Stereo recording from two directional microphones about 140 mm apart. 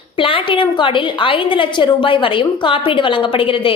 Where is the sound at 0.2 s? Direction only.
40° left (ahead or behind).